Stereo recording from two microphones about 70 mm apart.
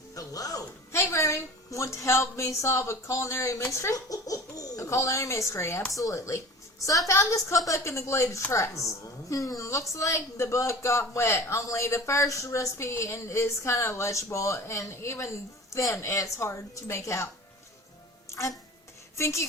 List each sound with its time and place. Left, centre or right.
0.1 s speech: left
0.9 s a child's voice: left
3.9 s speech: left
18.3 s music: left
19.1 s speech: left